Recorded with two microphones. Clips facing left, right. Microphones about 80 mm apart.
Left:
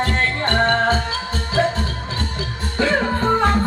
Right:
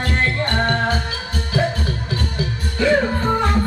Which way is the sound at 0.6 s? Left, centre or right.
Left.